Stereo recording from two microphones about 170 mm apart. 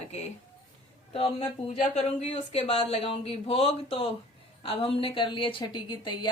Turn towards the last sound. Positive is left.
turn(degrees=25)  # may be behind; listen again after turning